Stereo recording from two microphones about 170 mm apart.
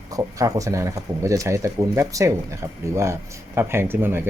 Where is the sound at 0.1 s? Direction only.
20° right (ahead or behind).